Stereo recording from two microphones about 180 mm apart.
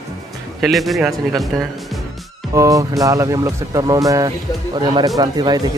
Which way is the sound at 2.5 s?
20° right (ahead or behind).